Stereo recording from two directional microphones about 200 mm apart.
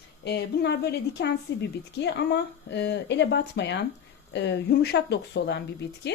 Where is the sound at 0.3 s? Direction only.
55° left (ahead or behind).